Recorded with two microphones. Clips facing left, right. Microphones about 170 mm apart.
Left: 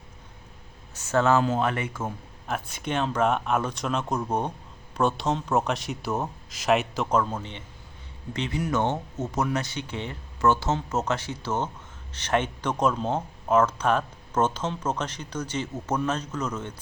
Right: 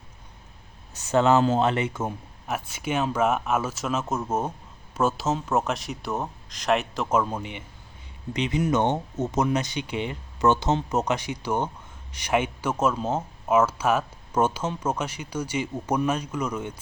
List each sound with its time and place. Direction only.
1.1 s speech: 20° right (ahead or behind)
2.5 s speech: 5° right (ahead or behind)